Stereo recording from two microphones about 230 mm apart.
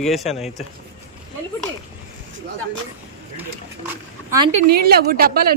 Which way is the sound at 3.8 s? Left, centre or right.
Centre.